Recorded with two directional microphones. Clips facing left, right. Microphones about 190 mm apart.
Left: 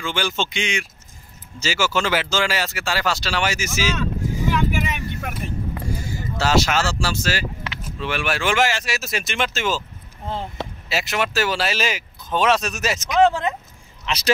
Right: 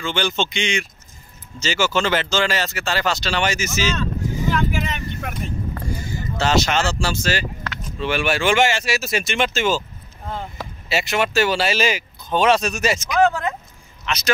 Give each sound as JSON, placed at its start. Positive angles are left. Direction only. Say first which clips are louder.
{"t": 0.0, "sound": "speech", "louder": "right 2 dB", "side_deg": 10}
{"t": 10.2, "sound": "speech", "louder": "left 2 dB", "side_deg": 30}
{"t": 10.9, "sound": "speech", "louder": "right 3 dB", "side_deg": 0}
{"t": 13.2, "sound": "speech", "louder": "left 2 dB", "side_deg": 25}